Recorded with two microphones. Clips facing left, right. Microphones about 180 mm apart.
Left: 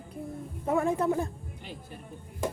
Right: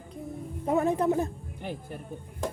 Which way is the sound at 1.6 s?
55° right (ahead or behind).